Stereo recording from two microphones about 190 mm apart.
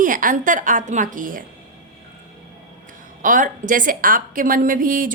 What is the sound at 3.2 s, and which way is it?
A woman's voice, 45° right (ahead or behind).